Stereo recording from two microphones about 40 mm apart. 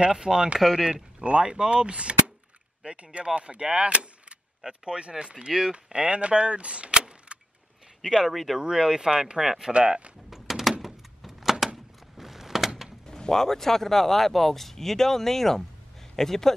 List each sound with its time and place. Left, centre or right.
0.0 s speech: centre
0.6 s speech: centre
1.2 s speech: right
8.0 s speech: centre
8.5 s speech: centre
9.7 s speech: right
10.3 s a sound: centre
12.2 s door: centre
13.0 s speech: centre